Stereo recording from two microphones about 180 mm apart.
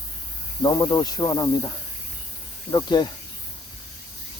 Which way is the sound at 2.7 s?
25° left (ahead or behind).